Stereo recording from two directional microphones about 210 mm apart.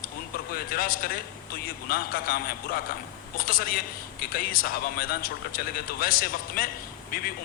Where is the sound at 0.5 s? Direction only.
45° left (ahead or behind).